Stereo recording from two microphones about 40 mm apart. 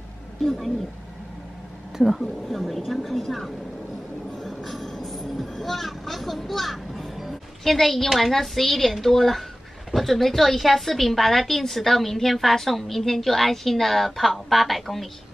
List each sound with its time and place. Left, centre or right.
0.4 s a woman's voice: centre
2.5 s a woman's voice: centre
4.4 s vehicle: centre
7.6 s a woman's voice: centre